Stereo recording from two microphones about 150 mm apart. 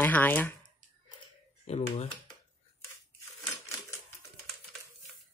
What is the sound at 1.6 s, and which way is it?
Speech, 45° left (ahead or behind).